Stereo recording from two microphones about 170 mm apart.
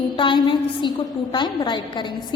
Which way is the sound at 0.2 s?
30° left (ahead or behind).